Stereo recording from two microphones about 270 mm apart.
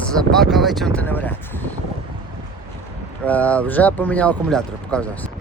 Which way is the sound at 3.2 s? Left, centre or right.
Centre.